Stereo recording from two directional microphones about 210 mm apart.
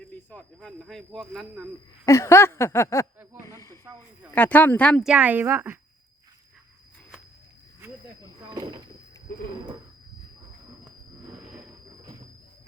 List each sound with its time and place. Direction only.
0.3 s speech: 5° left (ahead or behind)
2.0 s speech: 15° left (ahead or behind)
3.4 s snake: 15° left (ahead or behind)
4.4 s speech: 10° left (ahead or behind)
5.1 s a woman's voice: 10° right (ahead or behind)
7.8 s a sound: 20° right (ahead or behind)